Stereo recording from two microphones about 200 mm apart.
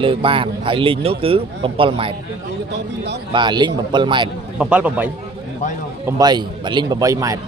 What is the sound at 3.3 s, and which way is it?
A man's voice, 20° right (ahead or behind).